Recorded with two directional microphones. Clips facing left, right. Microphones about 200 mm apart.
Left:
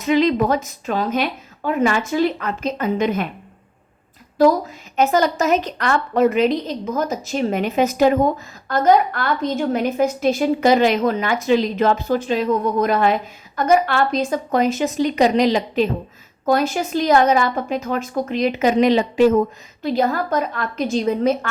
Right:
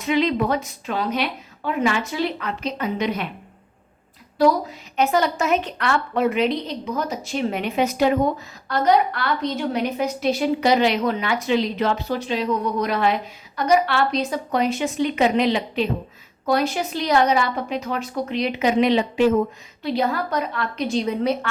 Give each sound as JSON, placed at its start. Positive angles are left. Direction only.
{"t": 0.0, "sound": "a woman's voice", "side_deg": 45}
{"t": 4.4, "sound": "a woman's voice", "side_deg": 45}